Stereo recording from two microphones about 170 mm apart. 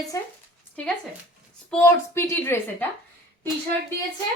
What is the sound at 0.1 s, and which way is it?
Speech, 20° left (ahead or behind).